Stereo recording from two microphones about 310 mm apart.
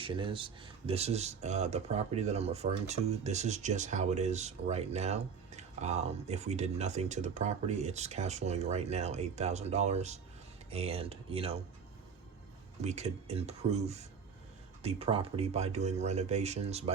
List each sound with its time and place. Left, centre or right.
0.0 s speech: centre
12.8 s speech: right